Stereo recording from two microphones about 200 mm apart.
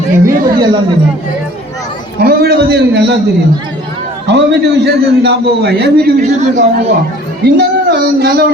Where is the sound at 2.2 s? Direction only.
50° right (ahead or behind).